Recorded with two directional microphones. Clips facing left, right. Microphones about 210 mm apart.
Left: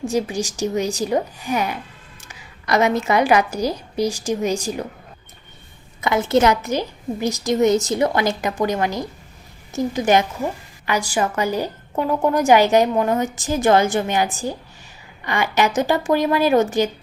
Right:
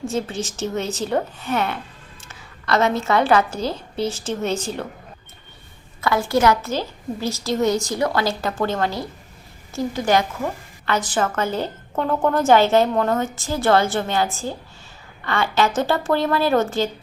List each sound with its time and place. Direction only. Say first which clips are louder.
0.0 s a woman's voice: left 3 dB; 15° left (ahead or behind)
6.0 s a woman's voice: left 2 dB; 20° left (ahead or behind)